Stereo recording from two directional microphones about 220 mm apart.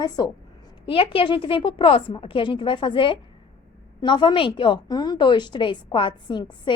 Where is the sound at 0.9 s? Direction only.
25° left (ahead or behind).